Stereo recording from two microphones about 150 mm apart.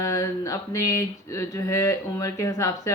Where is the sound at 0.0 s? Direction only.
20° left (ahead or behind).